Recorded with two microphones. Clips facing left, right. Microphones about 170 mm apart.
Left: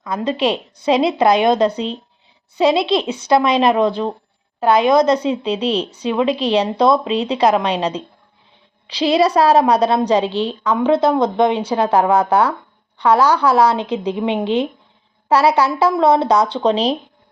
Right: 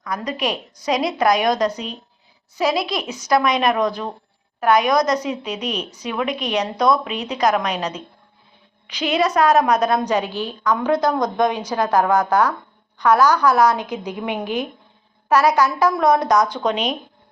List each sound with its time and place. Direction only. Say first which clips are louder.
0.0 s a woman's voice: left 6 dB; 25° left (ahead or behind)